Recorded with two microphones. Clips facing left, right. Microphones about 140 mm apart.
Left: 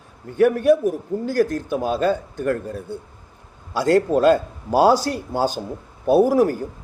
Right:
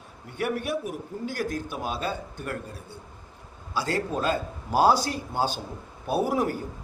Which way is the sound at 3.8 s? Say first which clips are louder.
Left 11 dB; 60° left (ahead or behind).